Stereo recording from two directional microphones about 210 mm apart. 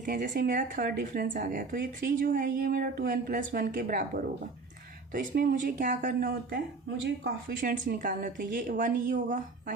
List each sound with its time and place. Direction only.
0.0 s speech: 40° right (ahead or behind)